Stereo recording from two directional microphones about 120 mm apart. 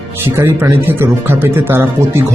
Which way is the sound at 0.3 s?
20° right (ahead or behind).